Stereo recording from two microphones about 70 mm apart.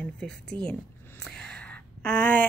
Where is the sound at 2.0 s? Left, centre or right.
Centre.